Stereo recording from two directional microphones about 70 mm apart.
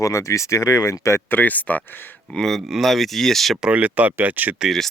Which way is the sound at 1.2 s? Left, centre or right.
Left.